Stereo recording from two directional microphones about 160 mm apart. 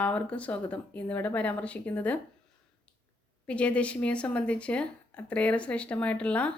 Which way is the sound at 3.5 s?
10° left (ahead or behind).